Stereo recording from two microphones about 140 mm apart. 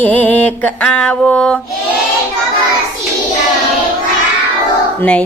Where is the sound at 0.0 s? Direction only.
10° left (ahead or behind).